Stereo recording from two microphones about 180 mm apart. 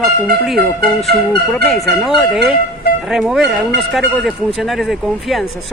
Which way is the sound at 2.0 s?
Centre (ahead or behind).